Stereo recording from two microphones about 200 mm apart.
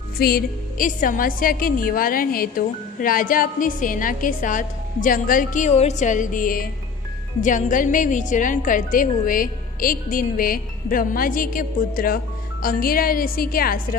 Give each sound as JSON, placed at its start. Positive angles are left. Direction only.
{"t": 0.2, "sound": "a woman's voice", "side_deg": 50}